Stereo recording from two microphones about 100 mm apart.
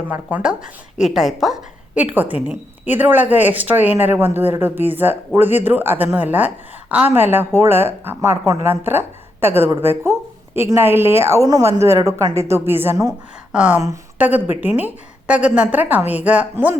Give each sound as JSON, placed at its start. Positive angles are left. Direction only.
{"t": 0.1, "sound": "a woman's voice", "side_deg": -15}
{"t": 0.9, "sound": "speech", "side_deg": -5}
{"t": 2.0, "sound": "a woman's voice", "side_deg": -15}
{"t": 13.5, "sound": "a woman's voice", "side_deg": -10}